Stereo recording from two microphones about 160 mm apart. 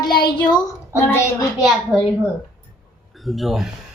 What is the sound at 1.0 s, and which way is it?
Speech, 15° left (ahead or behind).